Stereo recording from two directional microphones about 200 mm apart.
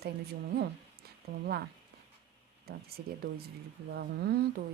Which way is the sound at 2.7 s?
50° right (ahead or behind).